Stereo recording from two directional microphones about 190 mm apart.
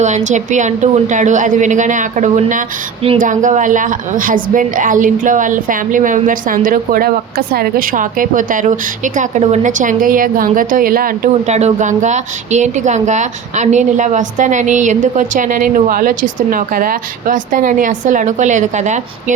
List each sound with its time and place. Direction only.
0.3 s a woman's voice: 40° right (ahead or behind)